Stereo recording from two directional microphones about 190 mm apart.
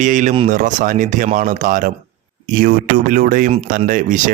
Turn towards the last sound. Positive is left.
turn(degrees=-45)  # may be behind; listen again after turning